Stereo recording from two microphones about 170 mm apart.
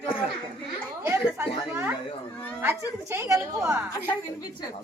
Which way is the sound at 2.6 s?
15° right (ahead or behind).